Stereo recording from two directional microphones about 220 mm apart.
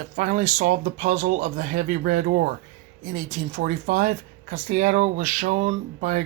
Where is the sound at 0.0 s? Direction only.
35° right (ahead or behind).